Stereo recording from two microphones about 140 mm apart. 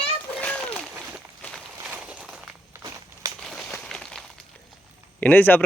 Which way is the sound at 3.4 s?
5° left (ahead or behind).